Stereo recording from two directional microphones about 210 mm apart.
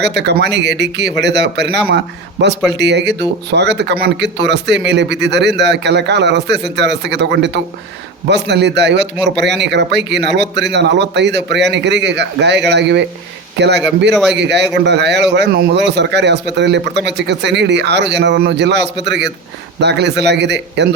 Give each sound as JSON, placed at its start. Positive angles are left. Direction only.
{"t": 0.0, "sound": "a man's voice", "side_deg": -55}
{"t": 14.1, "sound": "a man's voice", "side_deg": 0}
{"t": 14.3, "sound": "a man's voice", "side_deg": -55}